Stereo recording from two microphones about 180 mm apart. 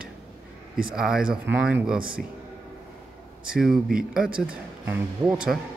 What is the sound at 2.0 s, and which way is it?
Speech, 55° right (ahead or behind).